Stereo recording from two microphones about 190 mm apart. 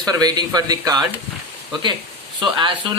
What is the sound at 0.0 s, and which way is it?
Speech, 20° right (ahead or behind).